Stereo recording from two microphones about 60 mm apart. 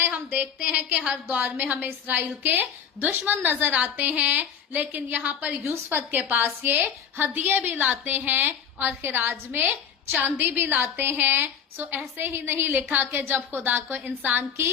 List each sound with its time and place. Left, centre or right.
0.0 s a sound: right
0.8 s a woman's voice: right
5.6 s a woman's voice: right